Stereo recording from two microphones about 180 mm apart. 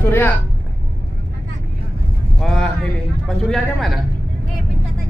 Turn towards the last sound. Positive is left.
turn(degrees=0)  # may be behind; listen again after turning